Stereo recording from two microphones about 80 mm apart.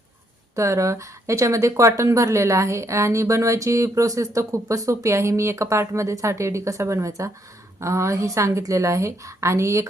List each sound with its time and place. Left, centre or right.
0.5 s a woman's voice: right